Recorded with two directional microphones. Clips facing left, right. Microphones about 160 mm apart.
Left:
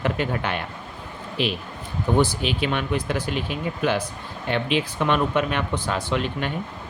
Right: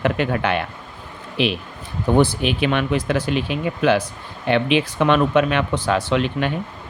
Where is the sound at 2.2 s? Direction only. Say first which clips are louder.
Right 4 dB; 60° right (ahead or behind); by 4.0 s 90° right.